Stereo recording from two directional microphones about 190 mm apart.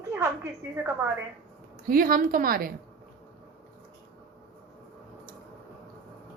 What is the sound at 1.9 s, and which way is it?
Speech, 50° right (ahead or behind).